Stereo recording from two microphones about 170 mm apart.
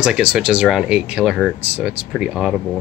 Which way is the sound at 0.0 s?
5° right (ahead or behind).